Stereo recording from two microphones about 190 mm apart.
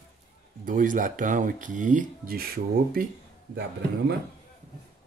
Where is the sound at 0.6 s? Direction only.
45° right (ahead or behind).